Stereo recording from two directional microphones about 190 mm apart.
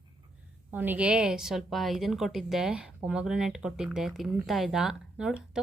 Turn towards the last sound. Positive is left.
turn(degrees=-5)  # may be behind; listen again after turning